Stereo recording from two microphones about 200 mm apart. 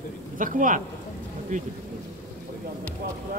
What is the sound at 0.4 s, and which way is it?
Speech, 40° right (ahead or behind).